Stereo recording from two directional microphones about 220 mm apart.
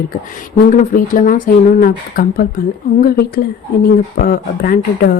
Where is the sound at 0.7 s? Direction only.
35° left (ahead or behind).